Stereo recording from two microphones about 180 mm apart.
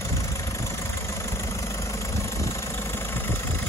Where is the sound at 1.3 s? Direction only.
15° left (ahead or behind).